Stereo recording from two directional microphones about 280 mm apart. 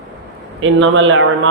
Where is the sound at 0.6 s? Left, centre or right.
Right.